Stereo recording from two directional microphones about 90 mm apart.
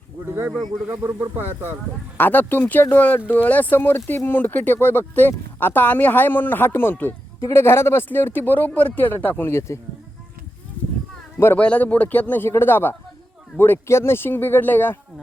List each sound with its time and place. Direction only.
0.9 s speech: 25° right (ahead or behind)
2.1 s speech: 20° left (ahead or behind)
11.3 s speech: 25° left (ahead or behind)